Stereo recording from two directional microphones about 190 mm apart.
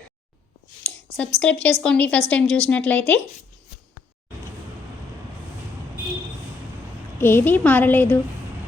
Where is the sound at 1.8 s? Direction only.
5° left (ahead or behind).